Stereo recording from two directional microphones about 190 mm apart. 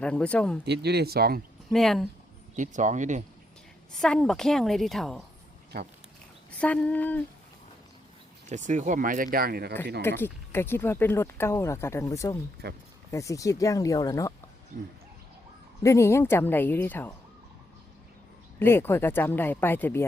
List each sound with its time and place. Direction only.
0.0 s a woman's voice: 5° left (ahead or behind)
0.6 s speech: 60° right (ahead or behind)
1.7 s a woman's voice: centre (ahead or behind)
2.6 s speech: 40° right (ahead or behind)
3.9 s a woman's voice: 5° left (ahead or behind)
6.6 s speech: 5° left (ahead or behind)
8.4 s speech: 40° right (ahead or behind)
10.0 s speech: 10° left (ahead or behind)
15.8 s speech: 15° left (ahead or behind)
18.6 s speech: 10° left (ahead or behind)